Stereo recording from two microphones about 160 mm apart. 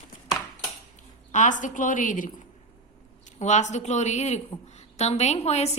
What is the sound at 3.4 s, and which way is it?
A woman's voice, 45° left (ahead or behind).